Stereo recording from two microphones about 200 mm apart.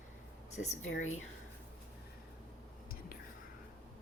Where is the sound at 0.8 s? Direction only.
80° left.